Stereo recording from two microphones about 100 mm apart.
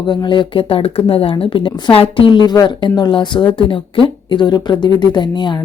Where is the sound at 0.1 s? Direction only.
50° left (ahead or behind).